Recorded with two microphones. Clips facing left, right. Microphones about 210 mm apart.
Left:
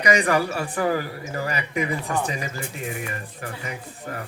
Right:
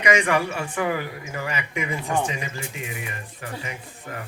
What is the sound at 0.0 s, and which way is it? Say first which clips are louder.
A man's voice: left 1 dB; 35° left (ahead or behind).